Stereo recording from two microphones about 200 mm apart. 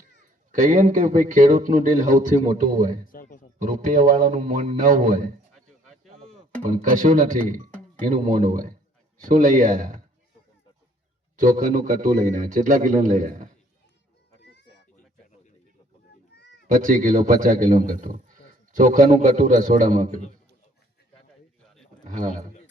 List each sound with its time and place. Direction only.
0.5 s a man's voice: 40° right (ahead or behind)
3.1 s a man's voice: 45° left (ahead or behind)
3.6 s a man's voice: 40° right (ahead or behind)
6.6 s a man's voice: 40° right (ahead or behind)
11.3 s a man's voice: 40° right (ahead or behind)
14.4 s a sound: 60° left (ahead or behind)
16.3 s a sound: 60° left (ahead or behind)
16.6 s a man's voice: 40° right (ahead or behind)